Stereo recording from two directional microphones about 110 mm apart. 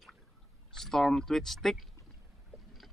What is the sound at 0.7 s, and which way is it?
Speech, 5° left (ahead or behind).